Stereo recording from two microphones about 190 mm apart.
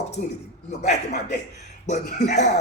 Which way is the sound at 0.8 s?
40° left (ahead or behind).